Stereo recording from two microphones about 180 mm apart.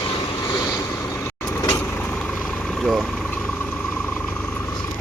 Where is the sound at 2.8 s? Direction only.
Centre (ahead or behind).